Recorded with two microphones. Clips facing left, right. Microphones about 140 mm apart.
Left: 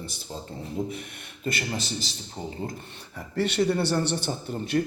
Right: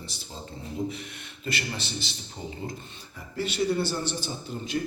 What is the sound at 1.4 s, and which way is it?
Speech, 40° left (ahead or behind).